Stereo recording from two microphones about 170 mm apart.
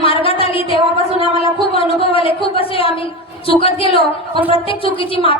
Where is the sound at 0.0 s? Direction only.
35° left (ahead or behind).